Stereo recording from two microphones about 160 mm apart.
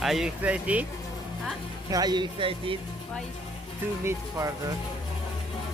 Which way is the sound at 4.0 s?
20° right (ahead or behind).